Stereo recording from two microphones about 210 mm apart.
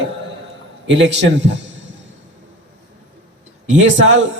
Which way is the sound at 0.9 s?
55° right (ahead or behind).